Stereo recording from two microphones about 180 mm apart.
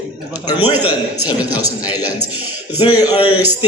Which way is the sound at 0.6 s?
10° right (ahead or behind).